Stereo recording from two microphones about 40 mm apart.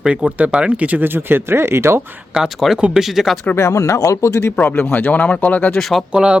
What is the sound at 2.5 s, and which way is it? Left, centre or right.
Speech, centre.